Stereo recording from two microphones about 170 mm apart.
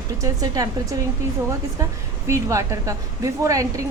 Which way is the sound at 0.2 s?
20° right (ahead or behind).